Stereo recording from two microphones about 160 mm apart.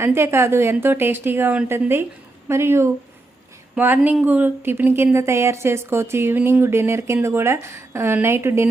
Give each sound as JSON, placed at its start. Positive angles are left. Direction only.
{"t": 0.0, "sound": "speech", "side_deg": -15}